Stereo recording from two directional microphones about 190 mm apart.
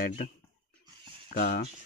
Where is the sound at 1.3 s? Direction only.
55° left (ahead or behind).